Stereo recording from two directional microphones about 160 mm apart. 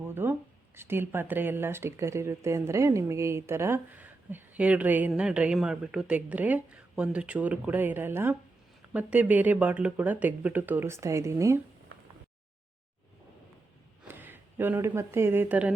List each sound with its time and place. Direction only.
0.0 s a sound: 15° right (ahead or behind)
0.8 s speech: 15° right (ahead or behind)
14.1 s speech: 10° right (ahead or behind)